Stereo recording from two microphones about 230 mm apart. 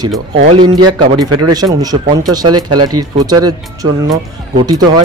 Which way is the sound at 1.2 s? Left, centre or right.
Right.